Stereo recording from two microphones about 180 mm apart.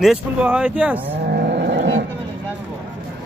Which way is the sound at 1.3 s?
60° right (ahead or behind).